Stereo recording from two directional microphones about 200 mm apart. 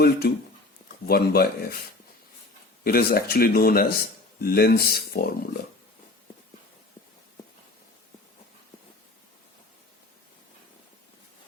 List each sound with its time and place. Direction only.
0.0 s speech: 55° left (ahead or behind)
2.8 s speech: 50° left (ahead or behind)